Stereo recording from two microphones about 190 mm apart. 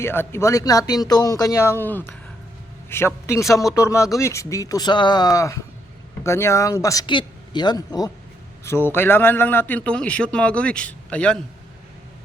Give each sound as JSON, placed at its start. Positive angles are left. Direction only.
{"t": 0.0, "sound": "a man's voice", "side_deg": 10}